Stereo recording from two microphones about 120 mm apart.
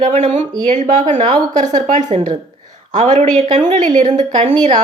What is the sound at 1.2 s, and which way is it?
A woman's voice, 80° right.